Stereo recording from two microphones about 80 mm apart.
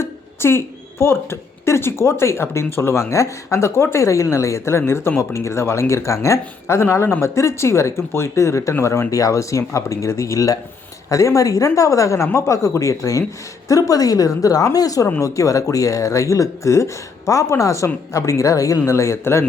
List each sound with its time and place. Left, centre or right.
0.0 s a woman's voice: left